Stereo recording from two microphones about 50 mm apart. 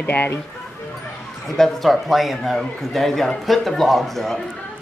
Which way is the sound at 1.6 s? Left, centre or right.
Centre.